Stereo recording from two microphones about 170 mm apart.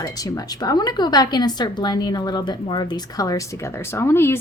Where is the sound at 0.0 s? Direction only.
20° left (ahead or behind).